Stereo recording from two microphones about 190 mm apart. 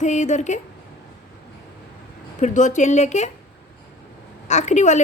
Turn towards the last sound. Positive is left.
turn(degrees=40)  # may be behind; listen again after turning